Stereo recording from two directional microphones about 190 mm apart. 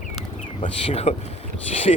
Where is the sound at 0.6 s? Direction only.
30° left (ahead or behind).